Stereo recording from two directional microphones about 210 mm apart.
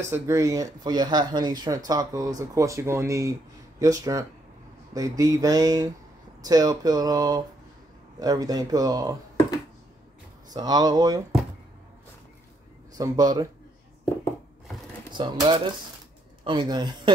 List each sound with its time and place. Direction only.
0.1 s speech: 15° right (ahead or behind)
10.5 s speech: 20° right (ahead or behind)
12.9 s speech: 15° right (ahead or behind)
15.0 s speech: 20° right (ahead or behind)